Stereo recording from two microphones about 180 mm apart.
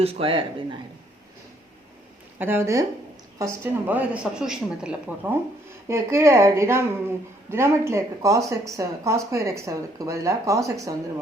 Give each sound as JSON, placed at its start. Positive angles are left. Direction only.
{"t": 0.0, "sound": "speech", "side_deg": -30}
{"t": 2.4, "sound": "speech", "side_deg": -15}